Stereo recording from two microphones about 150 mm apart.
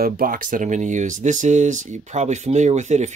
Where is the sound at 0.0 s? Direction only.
75° right (ahead or behind).